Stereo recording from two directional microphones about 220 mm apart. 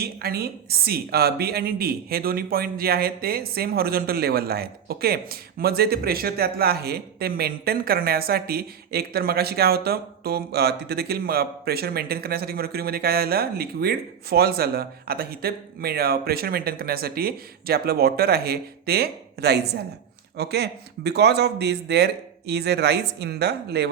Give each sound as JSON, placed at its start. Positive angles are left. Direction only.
{"t": 0.0, "sound": "a woman's voice", "side_deg": -45}